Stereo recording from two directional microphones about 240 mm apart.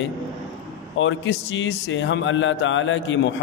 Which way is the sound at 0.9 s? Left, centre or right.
Left.